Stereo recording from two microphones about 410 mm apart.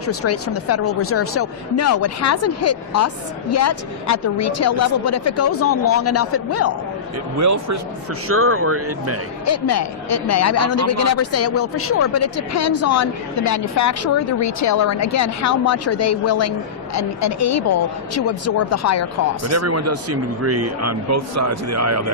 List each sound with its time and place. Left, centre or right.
0.1 s speech: left
7.3 s speech: right
8.3 s speech: right
9.5 s speech: left
19.5 s speech: right